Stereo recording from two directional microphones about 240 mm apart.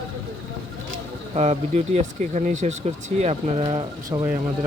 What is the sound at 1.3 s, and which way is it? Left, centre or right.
Speech, right.